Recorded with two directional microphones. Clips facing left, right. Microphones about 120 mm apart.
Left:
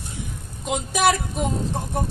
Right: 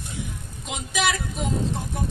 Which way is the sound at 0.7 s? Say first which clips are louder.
Left 6 dB; 50° left (ahead or behind).